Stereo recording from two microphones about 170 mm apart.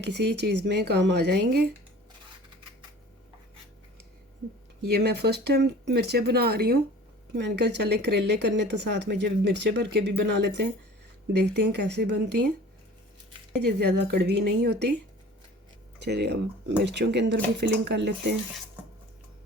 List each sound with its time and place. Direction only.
0.0 s speech: 80° right
4.9 s speech: 70° right (ahead or behind)
7.3 s speech: 85° right
13.6 s speech: 70° right (ahead or behind)
16.0 s speech: 75° right (ahead or behind)